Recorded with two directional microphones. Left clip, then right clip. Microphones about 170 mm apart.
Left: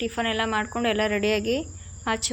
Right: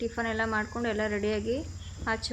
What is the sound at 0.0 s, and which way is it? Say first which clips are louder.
Speech: left 4 dB; 15° left (ahead or behind).